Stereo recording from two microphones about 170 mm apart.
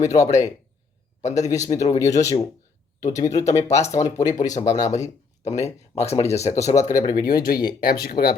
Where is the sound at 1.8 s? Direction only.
30° left (ahead or behind).